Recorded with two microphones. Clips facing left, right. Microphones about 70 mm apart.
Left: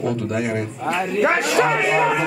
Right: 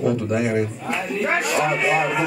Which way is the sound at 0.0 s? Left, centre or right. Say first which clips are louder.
Right 2 dB; centre.